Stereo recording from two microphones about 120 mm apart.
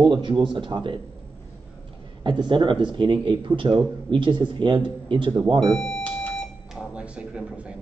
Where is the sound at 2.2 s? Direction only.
40° right (ahead or behind).